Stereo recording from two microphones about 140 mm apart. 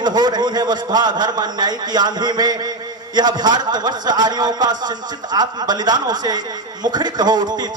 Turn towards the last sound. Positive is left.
turn(degrees=-30)  # may be behind; listen again after turning